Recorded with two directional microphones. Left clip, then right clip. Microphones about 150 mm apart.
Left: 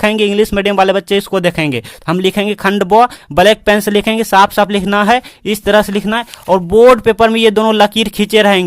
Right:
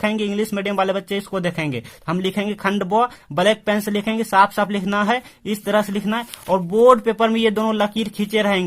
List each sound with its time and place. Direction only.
0.0 s speech: 45° left (ahead or behind)